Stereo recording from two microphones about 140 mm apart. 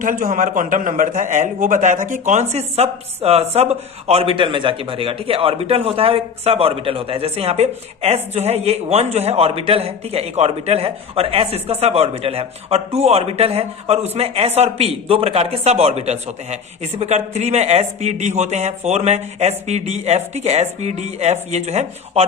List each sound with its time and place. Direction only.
0.0 s a man's voice: 75° right (ahead or behind); by 22.3 s 50° right (ahead or behind)